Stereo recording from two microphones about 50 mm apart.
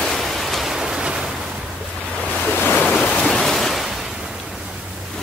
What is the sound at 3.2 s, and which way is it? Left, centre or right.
Waves, centre.